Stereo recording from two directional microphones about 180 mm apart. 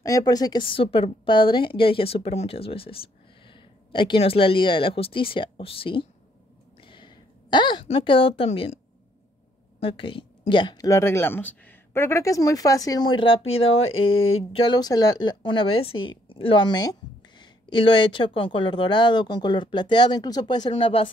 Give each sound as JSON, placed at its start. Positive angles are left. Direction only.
{"t": 0.0, "sound": "a woman's voice", "side_deg": 20}
{"t": 9.8, "sound": "speech", "side_deg": 30}